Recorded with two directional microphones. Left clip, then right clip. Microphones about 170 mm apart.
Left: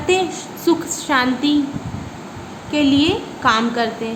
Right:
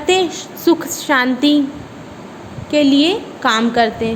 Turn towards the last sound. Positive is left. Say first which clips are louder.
# right 6 dB
turn(degrees=-30)  # may be behind; listen again after turning